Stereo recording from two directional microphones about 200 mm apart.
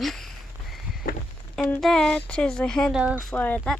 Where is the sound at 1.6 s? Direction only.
5° left (ahead or behind).